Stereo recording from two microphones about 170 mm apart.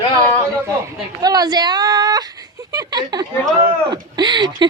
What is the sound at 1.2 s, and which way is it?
A woman's voice, 20° right (ahead or behind).